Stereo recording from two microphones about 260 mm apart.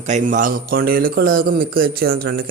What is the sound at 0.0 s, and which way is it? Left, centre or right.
Speech, right.